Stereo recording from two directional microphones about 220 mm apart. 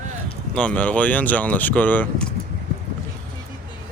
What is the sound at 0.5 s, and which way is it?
Speech, 5° left (ahead or behind).